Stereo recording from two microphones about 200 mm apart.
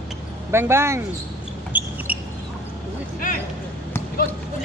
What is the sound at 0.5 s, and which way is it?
Speech, 10° right (ahead or behind).